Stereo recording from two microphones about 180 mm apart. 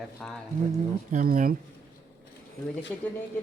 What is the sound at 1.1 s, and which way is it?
Speech, 50° right (ahead or behind).